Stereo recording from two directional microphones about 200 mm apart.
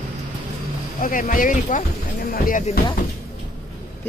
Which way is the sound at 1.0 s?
40° left (ahead or behind).